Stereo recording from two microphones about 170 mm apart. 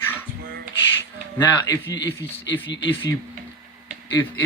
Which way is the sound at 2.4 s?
90° left.